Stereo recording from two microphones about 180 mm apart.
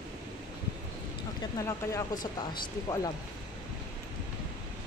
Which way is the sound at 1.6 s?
20° left (ahead or behind).